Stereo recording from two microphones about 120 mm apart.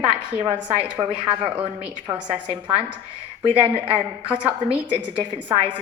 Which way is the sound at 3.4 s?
50° right (ahead or behind).